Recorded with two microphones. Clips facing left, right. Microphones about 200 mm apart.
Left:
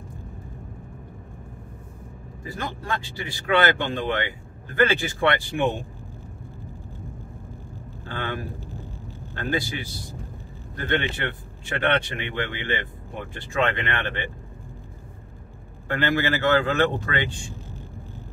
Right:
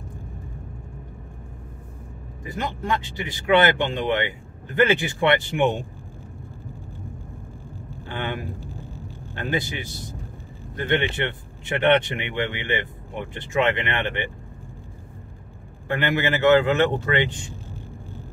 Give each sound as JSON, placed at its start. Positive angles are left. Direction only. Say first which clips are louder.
{"t": 2.4, "sound": "speech", "louder": "right 4 dB", "side_deg": -20}
{"t": 8.1, "sound": "speech", "louder": "right 1 dB", "side_deg": -20}
{"t": 15.9, "sound": "speech", "louder": "right 1 dB", "side_deg": -15}